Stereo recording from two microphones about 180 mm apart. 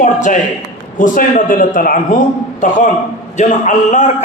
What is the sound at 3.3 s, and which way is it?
Speech, 40° left (ahead or behind).